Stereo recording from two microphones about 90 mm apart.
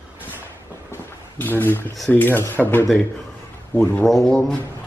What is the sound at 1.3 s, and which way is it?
Speech, 20° left (ahead or behind).